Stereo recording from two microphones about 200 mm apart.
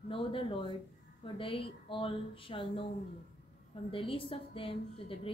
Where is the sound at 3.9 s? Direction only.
25° left (ahead or behind).